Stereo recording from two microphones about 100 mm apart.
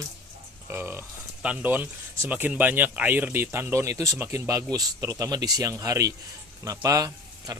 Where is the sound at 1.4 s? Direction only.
15° right (ahead or behind).